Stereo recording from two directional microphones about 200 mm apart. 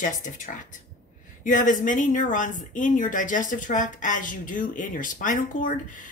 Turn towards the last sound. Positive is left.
turn(degrees=40)  # may be behind; listen again after turning